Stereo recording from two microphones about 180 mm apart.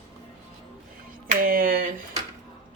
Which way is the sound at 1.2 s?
50° right (ahead or behind).